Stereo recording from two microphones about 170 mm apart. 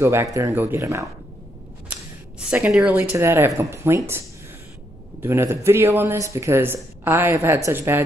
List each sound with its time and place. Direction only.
0.0 s speech: 15° right (ahead or behind)
2.5 s speech: 5° right (ahead or behind)
5.2 s speech: 15° right (ahead or behind)